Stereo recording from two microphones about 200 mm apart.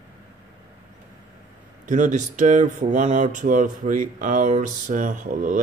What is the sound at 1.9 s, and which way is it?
Speech, 40° right (ahead or behind).